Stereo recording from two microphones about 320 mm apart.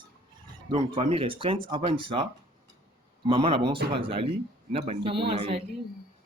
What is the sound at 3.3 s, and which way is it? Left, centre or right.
Speech, centre.